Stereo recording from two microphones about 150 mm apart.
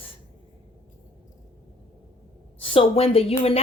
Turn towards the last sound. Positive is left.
turn(degrees=40)  # may be behind; listen again after turning